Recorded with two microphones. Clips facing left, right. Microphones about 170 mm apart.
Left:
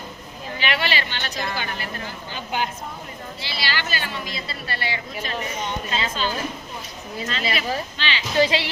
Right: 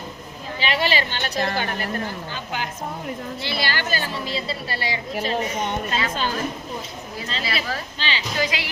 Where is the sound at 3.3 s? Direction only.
55° right (ahead or behind); by 5.0 s 35° right (ahead or behind).